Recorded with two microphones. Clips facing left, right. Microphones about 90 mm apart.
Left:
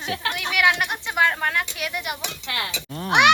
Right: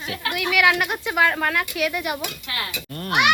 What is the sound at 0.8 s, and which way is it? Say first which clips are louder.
Speech: right 1 dB; 15° right (ahead or behind).